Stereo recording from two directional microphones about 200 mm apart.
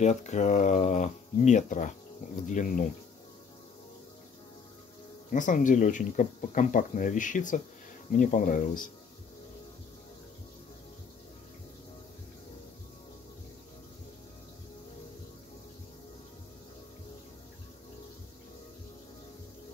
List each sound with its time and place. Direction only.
0.0 s speech: 35° left (ahead or behind)
5.3 s speech: 40° left (ahead or behind)